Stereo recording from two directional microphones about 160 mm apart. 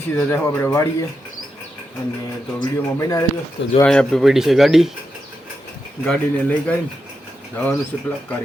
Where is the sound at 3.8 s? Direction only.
5° left (ahead or behind).